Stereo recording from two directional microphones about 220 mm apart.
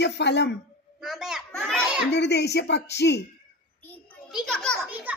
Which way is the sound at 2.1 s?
50° left (ahead or behind).